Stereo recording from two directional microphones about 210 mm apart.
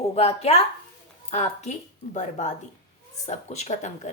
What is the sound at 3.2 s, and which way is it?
Speech, 30° left (ahead or behind).